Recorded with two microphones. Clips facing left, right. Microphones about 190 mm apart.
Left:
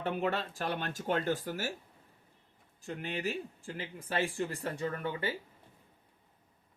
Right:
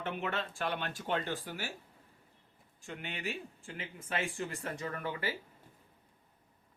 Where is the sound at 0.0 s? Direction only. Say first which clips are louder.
Left 4 dB; 35° left (ahead or behind).